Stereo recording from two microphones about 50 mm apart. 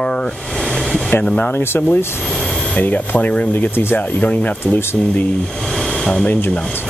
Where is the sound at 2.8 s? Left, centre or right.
Left.